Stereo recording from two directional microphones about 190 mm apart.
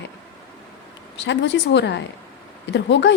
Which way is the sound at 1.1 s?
70° left (ahead or behind).